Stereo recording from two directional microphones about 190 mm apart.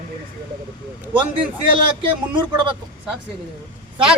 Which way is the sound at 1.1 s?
25° right (ahead or behind).